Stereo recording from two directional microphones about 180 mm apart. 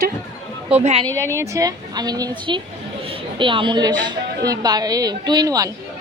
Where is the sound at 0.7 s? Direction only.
35° right (ahead or behind).